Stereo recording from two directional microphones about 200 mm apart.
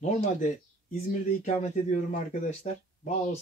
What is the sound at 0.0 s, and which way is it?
Speech, 35° left (ahead or behind).